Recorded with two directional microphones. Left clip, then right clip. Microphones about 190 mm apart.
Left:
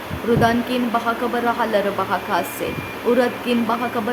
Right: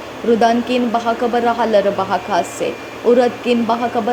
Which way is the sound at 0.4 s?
20° right (ahead or behind).